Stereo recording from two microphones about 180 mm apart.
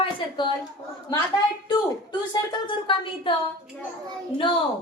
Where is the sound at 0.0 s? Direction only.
25° left (ahead or behind).